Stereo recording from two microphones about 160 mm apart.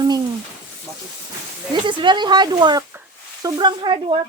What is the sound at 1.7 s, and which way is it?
Speech, 30° right (ahead or behind).